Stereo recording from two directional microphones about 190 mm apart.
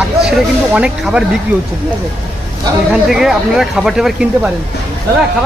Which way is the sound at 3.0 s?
Centre (ahead or behind).